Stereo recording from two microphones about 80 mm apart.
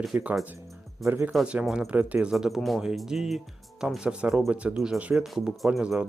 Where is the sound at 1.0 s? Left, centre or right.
Centre.